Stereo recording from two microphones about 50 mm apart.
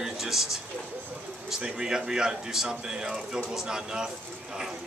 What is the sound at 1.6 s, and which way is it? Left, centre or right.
Speech, centre.